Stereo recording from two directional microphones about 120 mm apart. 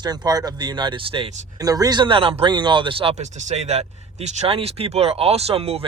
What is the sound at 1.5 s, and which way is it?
A man's voice, 30° right (ahead or behind).